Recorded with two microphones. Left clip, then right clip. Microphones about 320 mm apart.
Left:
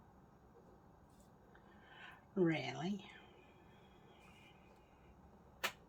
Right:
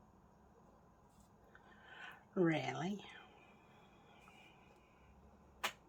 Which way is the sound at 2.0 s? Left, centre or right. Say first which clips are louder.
Right 1 dB; centre.